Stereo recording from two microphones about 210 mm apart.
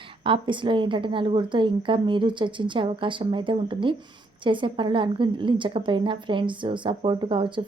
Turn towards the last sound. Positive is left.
turn(degrees=-25)  # may be behind; listen again after turning